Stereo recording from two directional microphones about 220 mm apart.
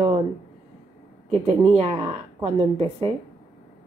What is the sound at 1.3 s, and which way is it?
Speech, 25° right (ahead or behind).